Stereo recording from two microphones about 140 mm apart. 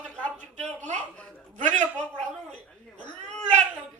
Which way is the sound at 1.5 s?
60° right (ahead or behind).